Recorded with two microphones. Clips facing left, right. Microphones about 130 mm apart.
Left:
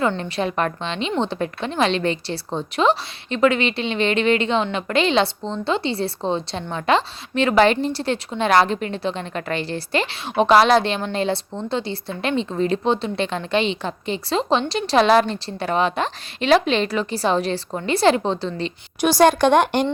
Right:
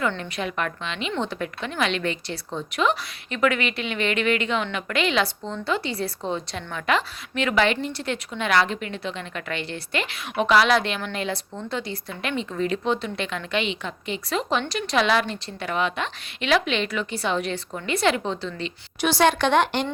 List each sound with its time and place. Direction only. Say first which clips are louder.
0.2 s a woman's voice: left 6 dB; 30° left (ahead or behind); by 19.9 s 45° left (ahead or behind)